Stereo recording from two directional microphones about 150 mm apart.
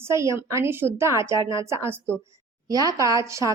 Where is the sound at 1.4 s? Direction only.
30° left (ahead or behind).